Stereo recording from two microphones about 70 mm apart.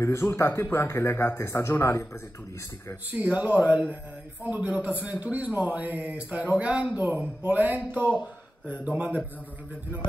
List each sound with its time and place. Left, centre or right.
0.0 s speech: left
3.1 s a man's voice: right